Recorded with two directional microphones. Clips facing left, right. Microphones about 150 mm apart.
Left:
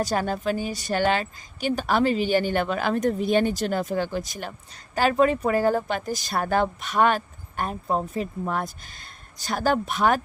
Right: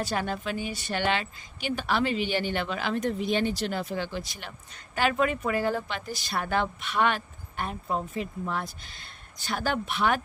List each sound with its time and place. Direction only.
0.0 s a woman's voice: 40° left (ahead or behind)